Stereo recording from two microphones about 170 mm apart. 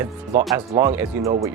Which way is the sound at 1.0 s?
20° right (ahead or behind).